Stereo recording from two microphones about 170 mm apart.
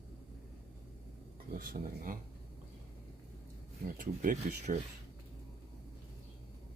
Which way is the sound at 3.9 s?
55° right (ahead or behind).